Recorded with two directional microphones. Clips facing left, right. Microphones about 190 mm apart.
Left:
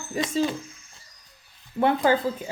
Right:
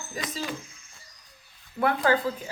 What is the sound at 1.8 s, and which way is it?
Speech, 25° left (ahead or behind).